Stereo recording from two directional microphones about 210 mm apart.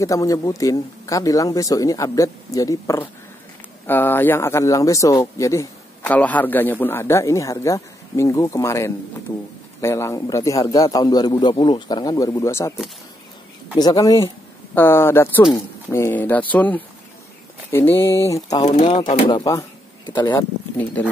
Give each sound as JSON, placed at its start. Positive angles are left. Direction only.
{"t": 0.0, "sound": "speech", "side_deg": 15}
{"t": 13.7, "sound": "speech", "side_deg": 20}